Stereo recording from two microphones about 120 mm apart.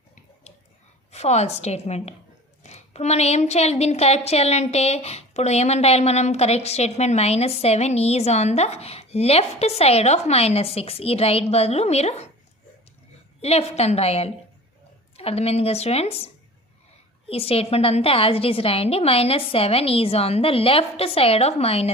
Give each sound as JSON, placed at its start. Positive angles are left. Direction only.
{"t": 1.1, "sound": "a woman's voice", "side_deg": 65}
{"t": 13.4, "sound": "a woman's voice", "side_deg": 60}